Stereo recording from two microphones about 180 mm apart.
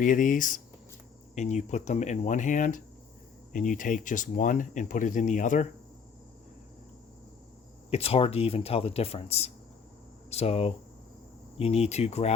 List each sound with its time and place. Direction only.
0.0 s speech: 45° left (ahead or behind)
7.9 s speech: 35° left (ahead or behind)